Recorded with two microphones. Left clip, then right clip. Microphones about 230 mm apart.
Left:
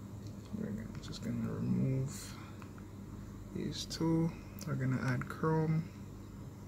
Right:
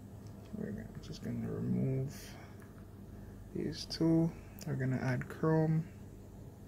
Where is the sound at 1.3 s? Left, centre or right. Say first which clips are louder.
Left 1 dB; centre.